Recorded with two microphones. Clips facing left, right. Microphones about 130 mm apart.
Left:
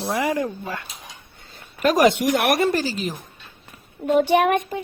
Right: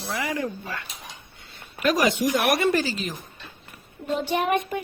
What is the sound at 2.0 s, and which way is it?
Speech, 70° left (ahead or behind).